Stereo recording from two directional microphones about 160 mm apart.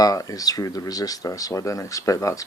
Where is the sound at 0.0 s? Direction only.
20° left (ahead or behind).